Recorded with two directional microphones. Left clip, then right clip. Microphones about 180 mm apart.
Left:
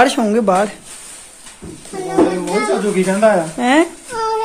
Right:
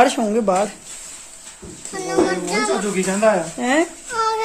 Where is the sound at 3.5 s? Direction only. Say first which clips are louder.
Left 5 dB; 5° right (ahead or behind).